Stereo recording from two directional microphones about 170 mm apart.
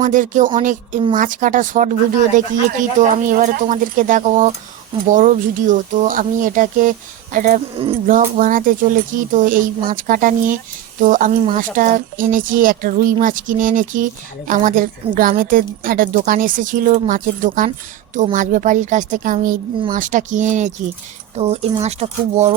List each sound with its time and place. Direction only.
0.0 s speech: 50° right (ahead or behind)